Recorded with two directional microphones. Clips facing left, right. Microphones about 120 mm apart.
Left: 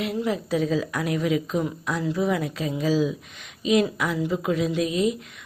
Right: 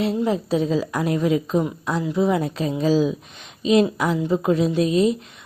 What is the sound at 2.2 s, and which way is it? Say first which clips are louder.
Speech: right 4 dB; 30° right (ahead or behind).